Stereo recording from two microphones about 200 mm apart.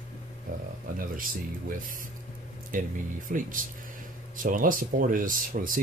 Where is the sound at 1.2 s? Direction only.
45° right (ahead or behind).